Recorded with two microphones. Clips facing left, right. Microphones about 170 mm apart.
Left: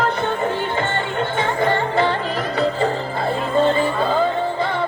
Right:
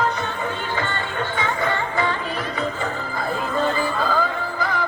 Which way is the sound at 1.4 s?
55° left (ahead or behind).